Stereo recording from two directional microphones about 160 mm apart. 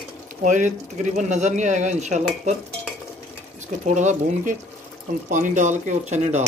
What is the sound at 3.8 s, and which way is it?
Speech, 50° right (ahead or behind).